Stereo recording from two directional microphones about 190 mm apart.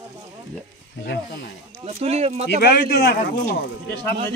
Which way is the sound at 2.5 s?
55° left (ahead or behind).